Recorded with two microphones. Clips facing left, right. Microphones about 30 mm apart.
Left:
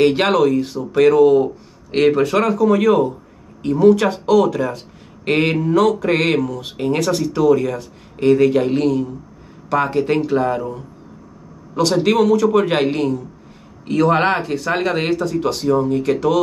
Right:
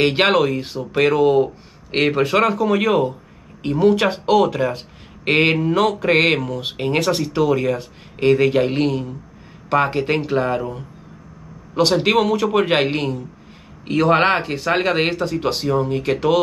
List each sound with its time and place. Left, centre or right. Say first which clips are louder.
0.0 s speech: left 2 dB; right